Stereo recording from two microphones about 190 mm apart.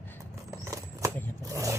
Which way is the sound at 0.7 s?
15° right (ahead or behind).